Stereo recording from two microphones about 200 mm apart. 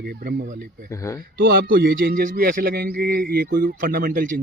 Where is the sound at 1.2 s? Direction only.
50° right (ahead or behind).